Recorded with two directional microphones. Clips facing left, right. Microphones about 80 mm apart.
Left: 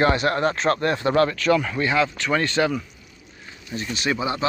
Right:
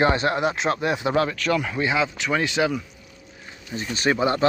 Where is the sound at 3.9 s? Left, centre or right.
Right.